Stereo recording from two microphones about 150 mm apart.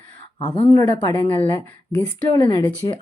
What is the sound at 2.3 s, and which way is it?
Speech, 30° left (ahead or behind).